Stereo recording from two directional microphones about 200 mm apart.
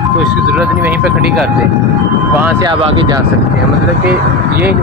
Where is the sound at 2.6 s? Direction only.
20° right (ahead or behind).